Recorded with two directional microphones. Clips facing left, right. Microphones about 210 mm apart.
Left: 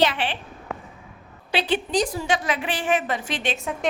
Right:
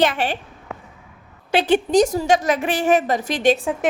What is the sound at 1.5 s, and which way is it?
A woman's voice, 45° right (ahead or behind).